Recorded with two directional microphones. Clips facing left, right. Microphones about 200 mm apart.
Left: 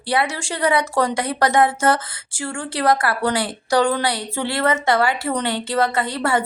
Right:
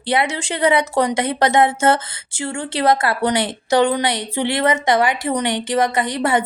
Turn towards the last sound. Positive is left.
turn(degrees=-20)  # may be behind; listen again after turning